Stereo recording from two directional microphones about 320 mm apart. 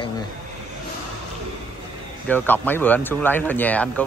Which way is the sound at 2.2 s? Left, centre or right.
Centre.